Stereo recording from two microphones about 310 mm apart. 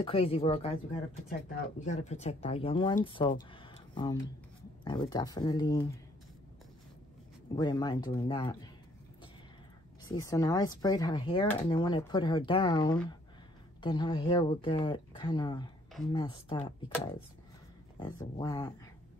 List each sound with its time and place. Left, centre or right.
0.0 s speech: centre
1.9 s speech: left
7.5 s speech: centre
10.0 s speech: centre